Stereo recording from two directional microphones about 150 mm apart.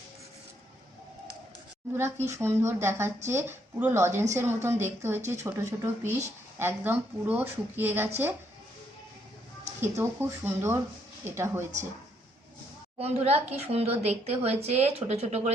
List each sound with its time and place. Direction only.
2.2 s a woman's voice: 20° right (ahead or behind)
9.8 s a woman's voice: 15° right (ahead or behind)
13.0 s a woman's voice: 45° right (ahead or behind)